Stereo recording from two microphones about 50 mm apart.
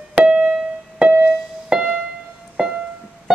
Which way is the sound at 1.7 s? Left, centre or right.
Centre.